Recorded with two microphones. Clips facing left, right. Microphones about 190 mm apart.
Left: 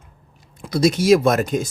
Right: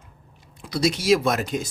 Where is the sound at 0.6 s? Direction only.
45° left (ahead or behind).